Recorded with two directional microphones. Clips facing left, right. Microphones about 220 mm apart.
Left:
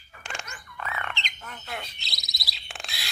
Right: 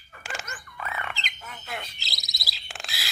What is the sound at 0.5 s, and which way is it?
Bird, 5° right (ahead or behind).